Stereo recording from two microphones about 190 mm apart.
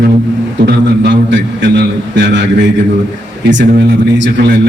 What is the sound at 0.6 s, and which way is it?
A man's voice, 65° right (ahead or behind).